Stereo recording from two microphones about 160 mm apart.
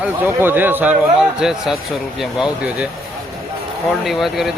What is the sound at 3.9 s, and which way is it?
Speech, centre (ahead or behind).